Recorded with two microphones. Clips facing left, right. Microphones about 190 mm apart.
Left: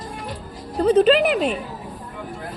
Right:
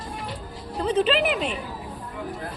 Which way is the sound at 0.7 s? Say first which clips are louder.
Left 7 dB; 45° left (ahead or behind).